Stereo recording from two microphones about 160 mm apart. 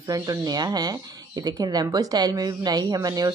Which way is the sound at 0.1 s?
25° right (ahead or behind).